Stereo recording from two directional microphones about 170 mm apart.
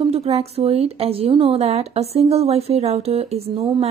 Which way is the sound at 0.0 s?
35° right (ahead or behind).